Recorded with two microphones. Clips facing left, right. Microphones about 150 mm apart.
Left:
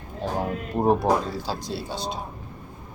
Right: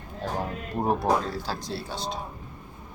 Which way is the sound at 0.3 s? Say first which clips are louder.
Left 4 dB; 20° left (ahead or behind).